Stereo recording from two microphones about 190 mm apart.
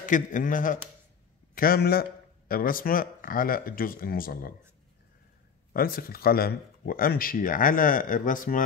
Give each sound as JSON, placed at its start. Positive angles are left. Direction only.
{"t": 0.0, "sound": "a man's voice", "side_deg": 45}
{"t": 5.7, "sound": "a man's voice", "side_deg": 50}